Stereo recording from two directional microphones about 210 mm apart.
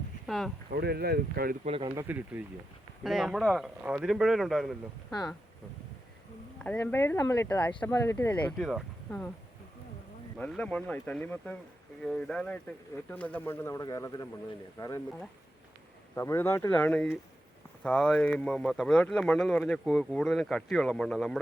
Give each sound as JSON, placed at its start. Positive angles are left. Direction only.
{"t": 0.3, "sound": "speech", "side_deg": 0}
{"t": 0.7, "sound": "speech", "side_deg": -50}
{"t": 1.6, "sound": "speech", "side_deg": -25}
{"t": 2.0, "sound": "speech", "side_deg": -10}
{"t": 6.6, "sound": "speech", "side_deg": 5}
{"t": 10.3, "sound": "speech", "side_deg": 5}
{"t": 16.1, "sound": "speech", "side_deg": 10}